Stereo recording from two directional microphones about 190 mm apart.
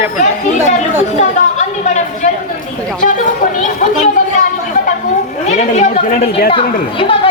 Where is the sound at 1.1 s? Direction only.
40° left (ahead or behind).